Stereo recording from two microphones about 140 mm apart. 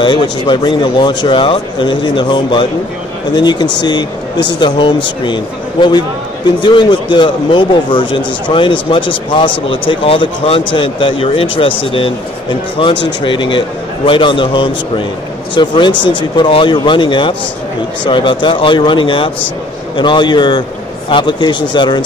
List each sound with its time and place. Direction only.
0.0 s speech: 35° left (ahead or behind)